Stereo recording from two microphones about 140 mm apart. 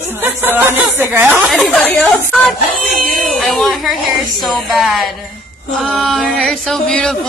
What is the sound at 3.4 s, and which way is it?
Speech, centre (ahead or behind).